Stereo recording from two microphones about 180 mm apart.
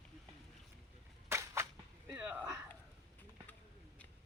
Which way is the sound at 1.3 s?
15° right (ahead or behind).